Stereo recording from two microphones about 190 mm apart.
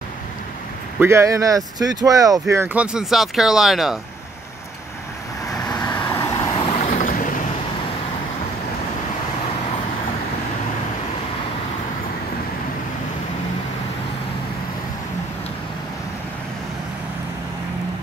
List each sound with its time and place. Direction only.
0.9 s speech: 15° right (ahead or behind)
5.7 s vehicle: 20° left (ahead or behind); by 7.4 s 45° left (ahead or behind)